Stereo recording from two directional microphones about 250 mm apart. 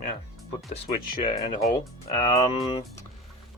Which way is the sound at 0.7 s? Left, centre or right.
Left.